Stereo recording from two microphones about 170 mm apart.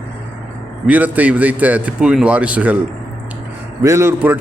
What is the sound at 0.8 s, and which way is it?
A man's voice, 10° right (ahead or behind).